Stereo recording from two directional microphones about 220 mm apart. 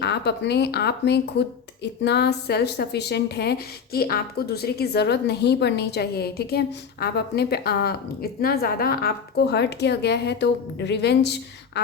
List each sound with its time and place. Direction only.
0.0 s speech: 50° left (ahead or behind)